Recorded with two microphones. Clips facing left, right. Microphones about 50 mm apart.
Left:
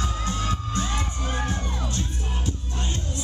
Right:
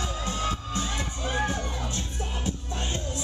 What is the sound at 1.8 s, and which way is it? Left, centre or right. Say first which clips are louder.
Music: left 2 dB; right.